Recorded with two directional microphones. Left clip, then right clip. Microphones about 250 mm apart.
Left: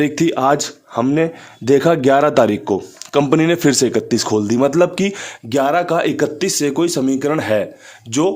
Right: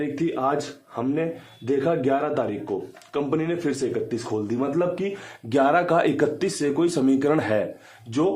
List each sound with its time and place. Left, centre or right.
0.0 s speech: left
5.5 s speech: left